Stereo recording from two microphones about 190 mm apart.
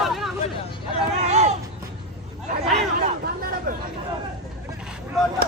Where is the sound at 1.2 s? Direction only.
35° right (ahead or behind).